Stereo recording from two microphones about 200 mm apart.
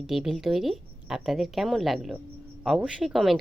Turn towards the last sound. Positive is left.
turn(degrees=0)  # may be behind; listen again after turning